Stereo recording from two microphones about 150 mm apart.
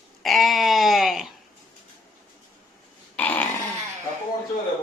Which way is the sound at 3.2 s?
10° left (ahead or behind).